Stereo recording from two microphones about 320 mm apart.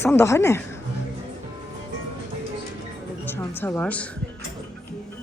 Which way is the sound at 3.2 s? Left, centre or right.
Centre.